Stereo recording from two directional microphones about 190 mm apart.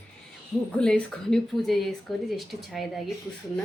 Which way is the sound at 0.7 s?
5° left (ahead or behind).